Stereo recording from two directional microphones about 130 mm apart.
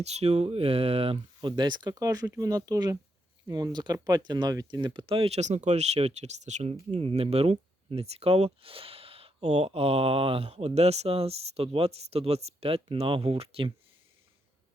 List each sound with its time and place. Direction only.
0.0 s speech: 55° right (ahead or behind)